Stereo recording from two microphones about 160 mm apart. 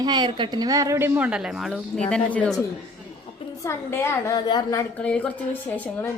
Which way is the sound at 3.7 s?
15° left (ahead or behind).